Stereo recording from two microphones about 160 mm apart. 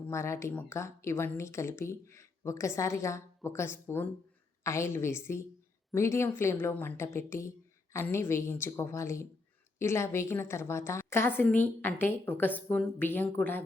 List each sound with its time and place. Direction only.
0.1 s speech: 15° left (ahead or behind)